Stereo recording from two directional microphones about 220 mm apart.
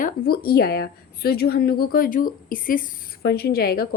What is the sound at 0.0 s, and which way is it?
Speech, 40° left (ahead or behind).